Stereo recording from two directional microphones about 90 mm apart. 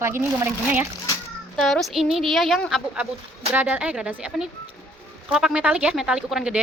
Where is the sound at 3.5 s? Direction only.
15° right (ahead or behind).